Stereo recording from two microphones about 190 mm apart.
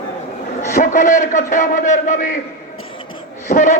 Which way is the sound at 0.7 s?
40° left (ahead or behind).